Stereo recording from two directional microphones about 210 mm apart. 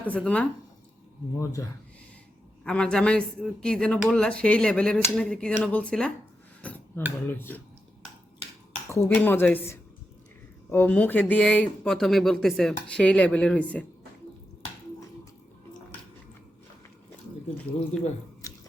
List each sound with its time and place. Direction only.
0.0 s speech: 5° left (ahead or behind)
1.6 s speech: 15° left (ahead or behind)
2.6 s speech: 5° left (ahead or behind)
6.6 s dishes: 10° left (ahead or behind)
7.3 s speech: 10° left (ahead or behind)
8.9 s speech: 10° left (ahead or behind)
18.4 s a sound: 15° left (ahead or behind)